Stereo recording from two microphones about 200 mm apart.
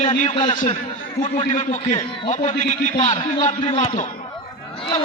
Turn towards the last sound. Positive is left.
turn(degrees=25)  # may be behind; listen again after turning